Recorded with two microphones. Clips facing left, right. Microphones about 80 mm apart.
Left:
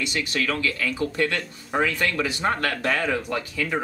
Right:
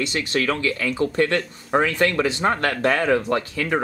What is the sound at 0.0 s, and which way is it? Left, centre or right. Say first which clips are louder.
Speech: right 3 dB; right.